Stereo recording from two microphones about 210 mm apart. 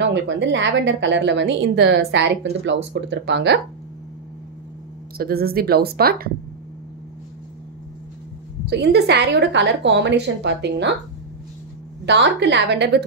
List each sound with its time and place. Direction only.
0.0 s a woman's voice: 60° right (ahead or behind)
5.1 s a woman's voice: 45° right (ahead or behind)
8.6 s a woman's voice: 50° right (ahead or behind)
12.1 s a woman's voice: 55° right (ahead or behind)